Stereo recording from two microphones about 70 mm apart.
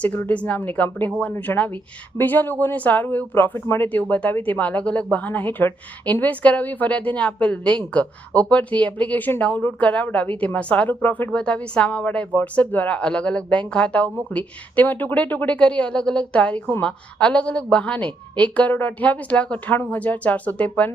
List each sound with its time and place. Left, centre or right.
0.0 s a woman's voice: left
11.3 s a woman's voice: centre